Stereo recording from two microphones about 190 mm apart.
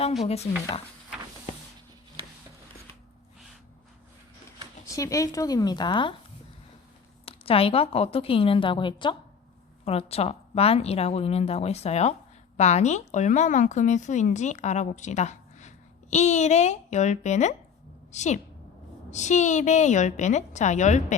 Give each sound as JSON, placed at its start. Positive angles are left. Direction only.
{"t": 0.3, "sound": "a woman's voice", "side_deg": 35}
{"t": 4.9, "sound": "a woman's voice", "side_deg": 15}
{"t": 7.3, "sound": "a woman's voice", "side_deg": 30}